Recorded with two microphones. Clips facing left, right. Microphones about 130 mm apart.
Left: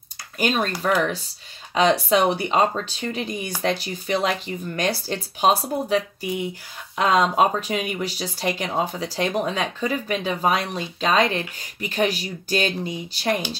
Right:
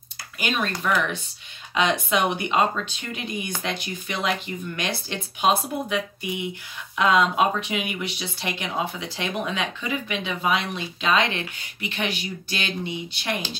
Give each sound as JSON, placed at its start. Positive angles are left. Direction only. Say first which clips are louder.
{"t": 0.4, "sound": "speech", "louder": "left 4 dB", "side_deg": 40}